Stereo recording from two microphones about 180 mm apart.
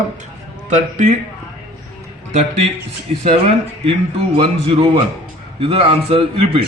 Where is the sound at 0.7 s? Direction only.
45° right (ahead or behind).